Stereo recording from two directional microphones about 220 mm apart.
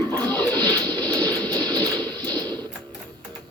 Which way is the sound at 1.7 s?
20° right (ahead or behind).